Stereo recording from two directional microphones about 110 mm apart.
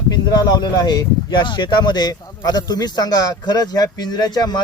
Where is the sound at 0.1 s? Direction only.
40° left (ahead or behind).